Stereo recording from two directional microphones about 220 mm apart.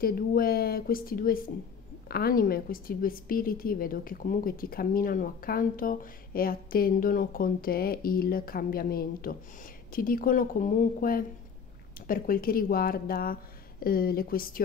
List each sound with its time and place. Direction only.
0.0 s a woman's voice: 40° left (ahead or behind)